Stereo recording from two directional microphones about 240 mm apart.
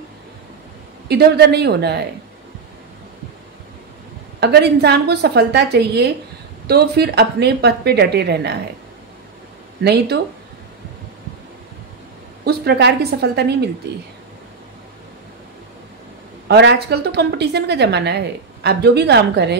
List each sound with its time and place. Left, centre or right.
1.0 s a woman's voice: right
4.4 s a woman's voice: right
9.8 s a woman's voice: right
12.4 s a woman's voice: right
16.4 s a woman's voice: right